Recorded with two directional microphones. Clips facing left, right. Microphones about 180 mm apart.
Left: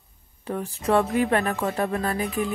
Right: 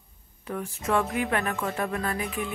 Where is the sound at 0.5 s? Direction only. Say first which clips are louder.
Left 4 dB; 35° left (ahead or behind).